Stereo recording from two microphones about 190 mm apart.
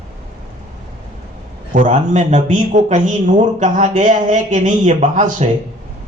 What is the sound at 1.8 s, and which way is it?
Speech, 40° right (ahead or behind).